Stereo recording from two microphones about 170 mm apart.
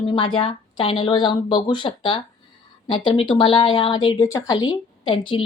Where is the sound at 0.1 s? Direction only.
30° left (ahead or behind).